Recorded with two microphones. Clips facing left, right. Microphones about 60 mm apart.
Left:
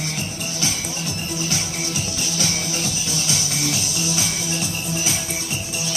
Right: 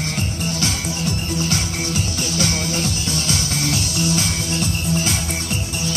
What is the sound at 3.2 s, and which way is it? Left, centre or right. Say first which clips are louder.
Music: right 1 dB; right.